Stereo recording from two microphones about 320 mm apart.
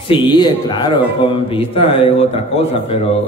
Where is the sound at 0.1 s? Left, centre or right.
Centre.